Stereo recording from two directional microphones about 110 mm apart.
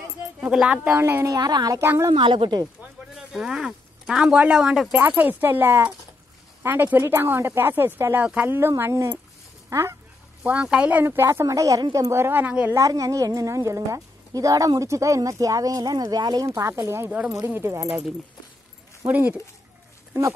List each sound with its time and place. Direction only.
0.4 s speech: 10° right (ahead or behind)
0.8 s speech: 20° right (ahead or behind)
1.4 s a woman's voice: 40° right (ahead or behind)
1.8 s speech: 25° right (ahead or behind)
2.1 s speech: 45° right (ahead or behind)
3.2 s speech: 5° right (ahead or behind)
4.9 s speech: 15° right (ahead or behind)
10.4 s speech: 10° right (ahead or behind)
12.7 s a woman's voice: 30° right (ahead or behind)
19.0 s speech: 15° right (ahead or behind)